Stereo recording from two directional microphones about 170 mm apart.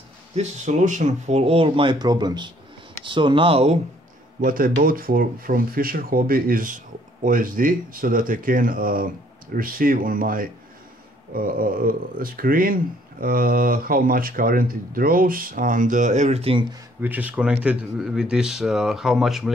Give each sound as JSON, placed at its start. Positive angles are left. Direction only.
{"t": 0.4, "sound": "speech", "side_deg": -45}
{"t": 4.4, "sound": "speech", "side_deg": -55}
{"t": 17.0, "sound": "speech", "side_deg": -10}